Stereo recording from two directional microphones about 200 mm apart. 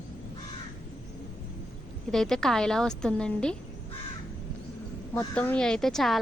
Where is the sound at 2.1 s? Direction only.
Centre (ahead or behind).